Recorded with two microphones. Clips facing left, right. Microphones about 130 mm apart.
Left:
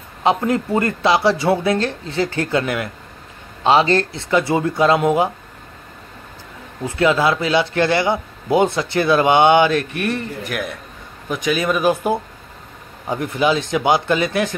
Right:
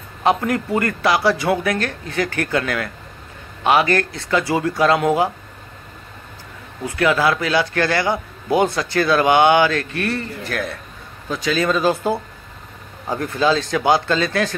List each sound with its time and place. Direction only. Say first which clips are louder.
0.2 s a man's voice: left 1 dB; 20° left (ahead or behind)
6.8 s a man's voice: left 1 dB; 25° left (ahead or behind)